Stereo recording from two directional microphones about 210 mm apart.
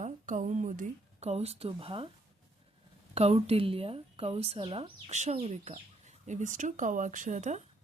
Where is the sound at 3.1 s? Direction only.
30° right (ahead or behind).